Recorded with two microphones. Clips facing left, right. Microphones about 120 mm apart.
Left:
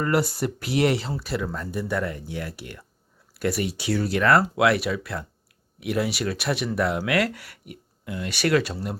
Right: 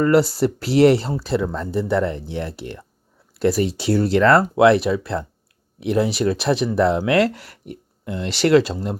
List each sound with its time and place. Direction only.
0.1 s speech: 30° right (ahead or behind)